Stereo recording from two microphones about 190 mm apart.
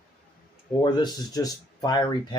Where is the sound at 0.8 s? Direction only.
25° left (ahead or behind).